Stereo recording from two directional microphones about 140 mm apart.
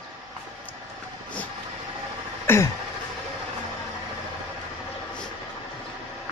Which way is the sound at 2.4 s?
15° left (ahead or behind).